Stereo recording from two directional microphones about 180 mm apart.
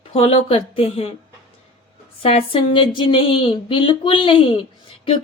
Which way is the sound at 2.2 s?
30° left (ahead or behind).